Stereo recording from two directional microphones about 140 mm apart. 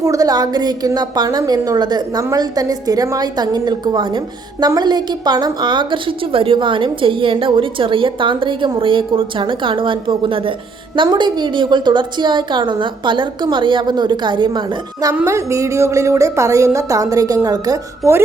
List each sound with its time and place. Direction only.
0.0 s a woman's voice: 25° right (ahead or behind)
15.1 s a woman's voice: 20° right (ahead or behind)